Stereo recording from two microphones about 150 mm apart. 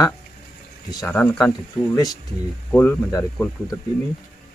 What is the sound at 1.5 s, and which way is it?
Speech, 25° left (ahead or behind).